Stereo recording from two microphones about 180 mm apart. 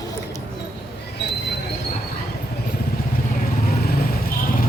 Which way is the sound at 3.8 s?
55° left (ahead or behind).